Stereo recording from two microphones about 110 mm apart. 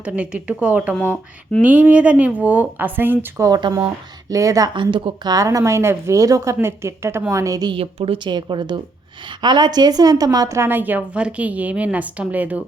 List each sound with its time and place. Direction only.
0.0 s a woman's voice: 10° right (ahead or behind)
1.0 s speech: 15° left (ahead or behind)
1.6 s a woman's voice: 10° right (ahead or behind)
3.4 s speech: 35° right (ahead or behind)
4.7 s a woman's voice: 45° right (ahead or behind)
5.3 s a woman's voice: 30° right (ahead or behind)
7.7 s a woman's voice: 60° right (ahead or behind); by 12.6 s 15° right (ahead or behind)